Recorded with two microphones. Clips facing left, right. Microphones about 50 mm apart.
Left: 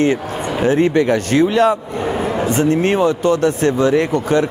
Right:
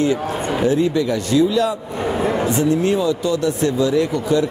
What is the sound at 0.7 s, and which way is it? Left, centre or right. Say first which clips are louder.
Speech: left 5 dB; left.